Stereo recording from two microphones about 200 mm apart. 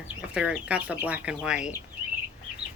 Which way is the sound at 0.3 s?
5° right (ahead or behind).